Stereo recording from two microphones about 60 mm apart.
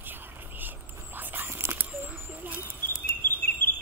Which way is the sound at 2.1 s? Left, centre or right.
Right.